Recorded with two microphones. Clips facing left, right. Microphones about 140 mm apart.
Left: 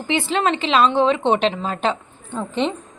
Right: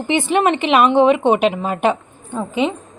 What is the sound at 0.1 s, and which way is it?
A woman's voice, 15° right (ahead or behind).